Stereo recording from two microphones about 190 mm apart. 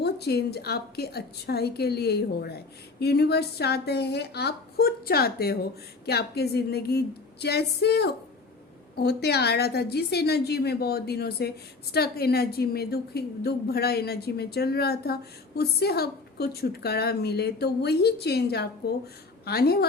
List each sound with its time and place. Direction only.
0.0 s a woman's voice: 60° left (ahead or behind)